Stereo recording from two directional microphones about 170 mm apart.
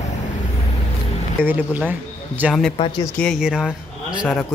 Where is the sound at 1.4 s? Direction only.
10° right (ahead or behind).